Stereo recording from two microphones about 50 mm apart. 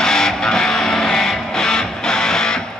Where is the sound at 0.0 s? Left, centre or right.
Centre.